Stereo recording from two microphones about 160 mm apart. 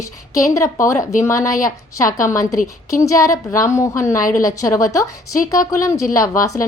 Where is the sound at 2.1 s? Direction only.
55° left (ahead or behind).